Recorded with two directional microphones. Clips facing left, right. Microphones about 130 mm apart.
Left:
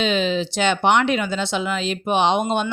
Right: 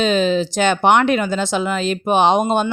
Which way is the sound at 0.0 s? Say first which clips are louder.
Right 4 dB; 40° right (ahead or behind).